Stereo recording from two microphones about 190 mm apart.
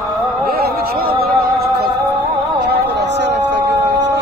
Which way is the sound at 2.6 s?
60° right (ahead or behind).